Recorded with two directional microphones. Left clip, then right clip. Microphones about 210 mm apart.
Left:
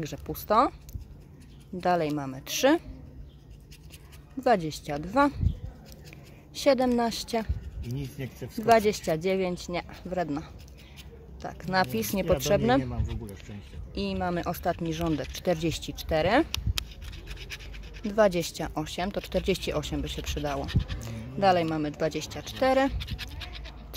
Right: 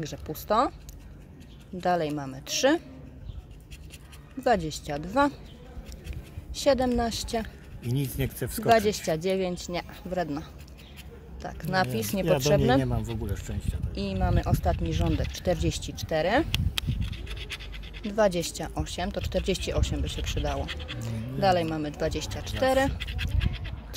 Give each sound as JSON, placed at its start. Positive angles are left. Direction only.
{"t": 0.0, "sound": "speech", "side_deg": 10}
{"t": 1.8, "sound": "speech", "side_deg": 10}
{"t": 4.4, "sound": "speech", "side_deg": 10}
{"t": 6.5, "sound": "speech", "side_deg": 10}
{"t": 8.0, "sound": "speech", "side_deg": -45}
{"t": 8.6, "sound": "speech", "side_deg": 10}
{"t": 13.9, "sound": "speech", "side_deg": 10}
{"t": 16.5, "sound": "scratch", "side_deg": 0}
{"t": 18.0, "sound": "speech", "side_deg": 10}